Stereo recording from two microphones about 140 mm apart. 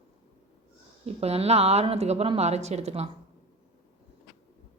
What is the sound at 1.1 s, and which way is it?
A woman's voice, 45° right (ahead or behind).